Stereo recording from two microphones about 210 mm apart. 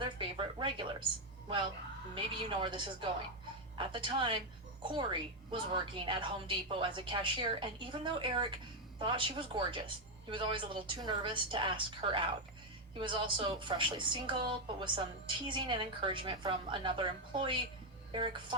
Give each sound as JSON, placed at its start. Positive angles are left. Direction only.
{"t": 0.0, "sound": "a woman's voice", "side_deg": -25}
{"t": 2.1, "sound": "a woman's voice", "side_deg": -25}